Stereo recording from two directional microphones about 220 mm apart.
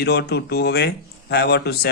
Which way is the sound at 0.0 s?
50° left (ahead or behind).